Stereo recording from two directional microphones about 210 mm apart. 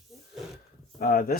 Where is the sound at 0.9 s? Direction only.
45° left (ahead or behind).